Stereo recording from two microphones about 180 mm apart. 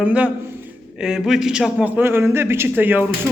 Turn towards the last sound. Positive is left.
turn(degrees=-10)  # may be behind; listen again after turning